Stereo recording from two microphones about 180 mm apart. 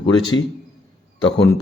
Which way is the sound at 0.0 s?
25° left (ahead or behind).